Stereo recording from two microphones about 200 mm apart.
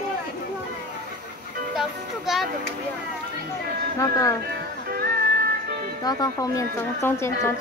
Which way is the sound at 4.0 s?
15° left (ahead or behind).